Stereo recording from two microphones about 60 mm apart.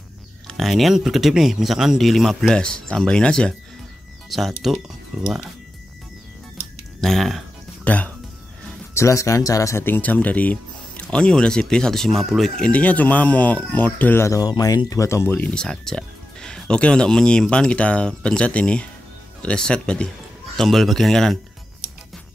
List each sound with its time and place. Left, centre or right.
0.5 s speech: centre
2.5 s speech: centre
4.3 s speech: centre
5.2 s speech: centre
7.0 s speech: centre
7.8 s speech: left
8.9 s speech: left
9.8 s speech: left; by 12.6 s centre
12.6 s speech: left
14.2 s speech: left
15.2 s speech: left
15.5 s speech: centre
20.5 s speech: centre